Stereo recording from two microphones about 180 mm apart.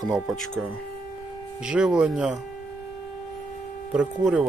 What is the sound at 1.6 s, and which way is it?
Speech, 5° right (ahead or behind).